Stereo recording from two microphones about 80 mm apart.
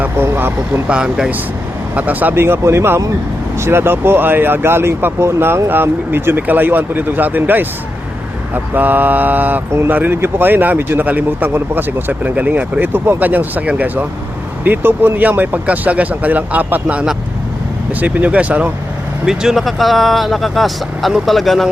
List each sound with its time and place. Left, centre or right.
0.0 s vehicle: right
0.9 s speech: centre
2.0 s speech: right
19.2 s speech: centre